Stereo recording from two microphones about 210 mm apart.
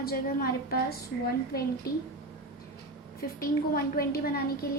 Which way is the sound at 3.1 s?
45° left (ahead or behind).